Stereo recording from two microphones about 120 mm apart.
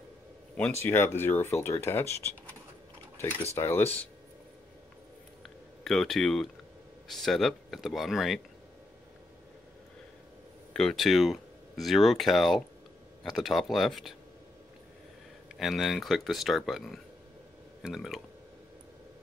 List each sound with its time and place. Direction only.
0.8 s speech: 20° left (ahead or behind)
5.4 s a sound: centre (ahead or behind)
7.1 s speech: centre (ahead or behind)
10.7 s speech: 5° left (ahead or behind)
15.4 s speech: centre (ahead or behind)